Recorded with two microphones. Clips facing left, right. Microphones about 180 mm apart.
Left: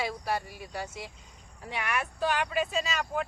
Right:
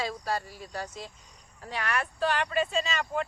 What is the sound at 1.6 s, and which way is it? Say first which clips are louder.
Speech: right 1 dB; 10° left (ahead or behind).